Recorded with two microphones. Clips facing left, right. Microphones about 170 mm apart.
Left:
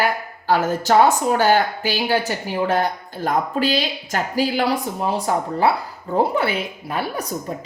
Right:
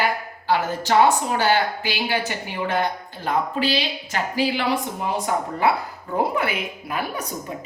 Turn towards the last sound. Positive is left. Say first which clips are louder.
# left 3 dB
turn(degrees=40)  # may be behind; listen again after turning